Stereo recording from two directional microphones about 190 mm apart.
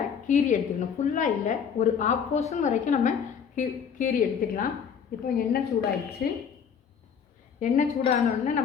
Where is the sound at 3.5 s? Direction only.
50° left (ahead or behind).